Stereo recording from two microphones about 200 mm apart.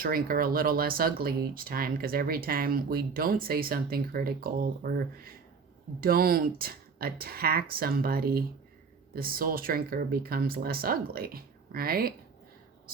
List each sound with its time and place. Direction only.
0.0 s speech: 45° right (ahead or behind)